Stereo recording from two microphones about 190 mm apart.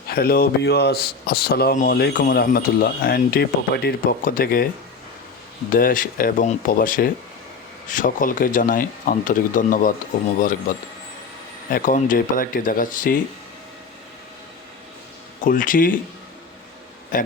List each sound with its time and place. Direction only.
0.1 s speech: 50° left (ahead or behind)
5.7 s speech: 45° left (ahead or behind)
11.7 s speech: 45° left (ahead or behind)
15.4 s speech: 45° left (ahead or behind)
17.1 s speech: 45° left (ahead or behind)